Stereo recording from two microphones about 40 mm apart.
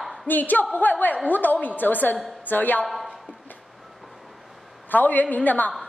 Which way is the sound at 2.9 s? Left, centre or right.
Centre.